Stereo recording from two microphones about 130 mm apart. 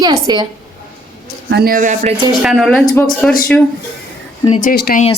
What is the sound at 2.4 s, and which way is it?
Speech, 5° right (ahead or behind).